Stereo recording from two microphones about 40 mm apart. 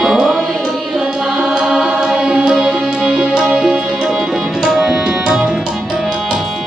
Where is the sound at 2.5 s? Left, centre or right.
Centre.